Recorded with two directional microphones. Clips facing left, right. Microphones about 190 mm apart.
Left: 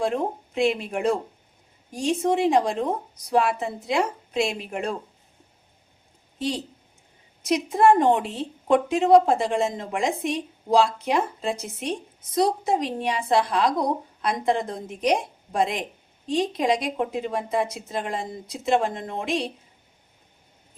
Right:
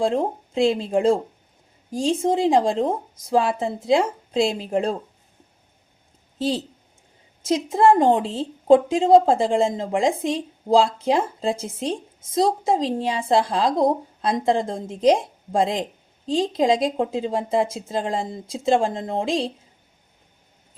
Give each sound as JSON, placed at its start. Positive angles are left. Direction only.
{"t": 0.0, "sound": "a woman's voice", "side_deg": -30}
{"t": 7.4, "sound": "a woman's voice", "side_deg": -30}